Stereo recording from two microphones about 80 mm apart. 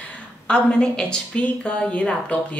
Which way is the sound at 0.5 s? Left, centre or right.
Centre.